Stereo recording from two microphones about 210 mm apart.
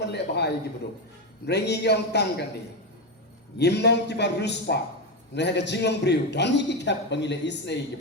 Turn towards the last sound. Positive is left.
turn(degrees=55)  # may be behind; listen again after turning